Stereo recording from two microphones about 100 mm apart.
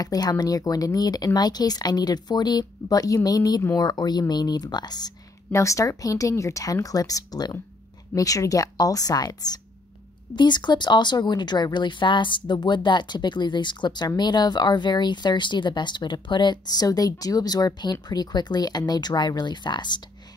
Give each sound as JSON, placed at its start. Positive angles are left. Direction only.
{"t": 0.0, "sound": "speech", "side_deg": 40}